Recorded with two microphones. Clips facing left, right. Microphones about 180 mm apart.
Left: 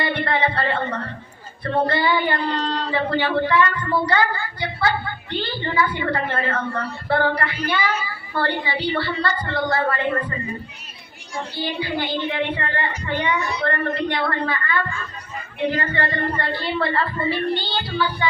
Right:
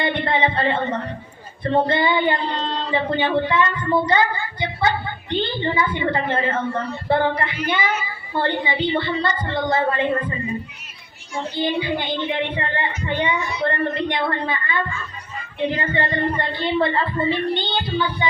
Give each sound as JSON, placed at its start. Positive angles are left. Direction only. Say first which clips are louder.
{"t": 0.0, "sound": "a woman's voice", "louder": "right 1 dB", "side_deg": -20}
{"t": 11.5, "sound": "a woman's voice", "louder": "right 4 dB", "side_deg": -20}